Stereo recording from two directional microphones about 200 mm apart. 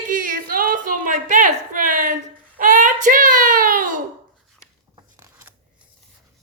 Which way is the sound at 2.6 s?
40° right (ahead or behind).